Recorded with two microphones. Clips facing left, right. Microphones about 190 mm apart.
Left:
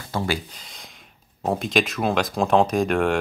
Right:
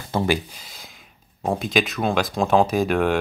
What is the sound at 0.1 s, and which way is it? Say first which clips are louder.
Speech: right 4 dB; 15° right (ahead or behind).